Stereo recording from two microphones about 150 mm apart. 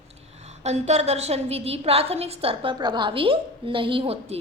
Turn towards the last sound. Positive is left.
turn(degrees=-40)  # may be behind; listen again after turning